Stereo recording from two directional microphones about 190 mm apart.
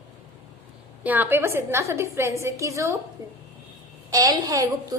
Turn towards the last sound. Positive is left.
turn(degrees=-20)  # may be behind; listen again after turning